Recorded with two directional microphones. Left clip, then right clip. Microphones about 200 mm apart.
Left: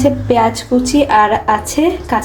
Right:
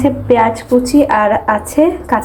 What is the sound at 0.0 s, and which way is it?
A woman's voice, 5° left (ahead or behind).